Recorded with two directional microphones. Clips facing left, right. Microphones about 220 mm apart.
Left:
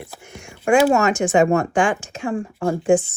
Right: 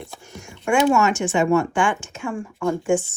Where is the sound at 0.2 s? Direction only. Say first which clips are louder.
Even; 15° left (ahead or behind).